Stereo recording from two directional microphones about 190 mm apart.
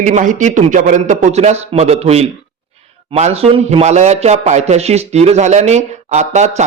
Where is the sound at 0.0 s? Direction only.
40° right (ahead or behind).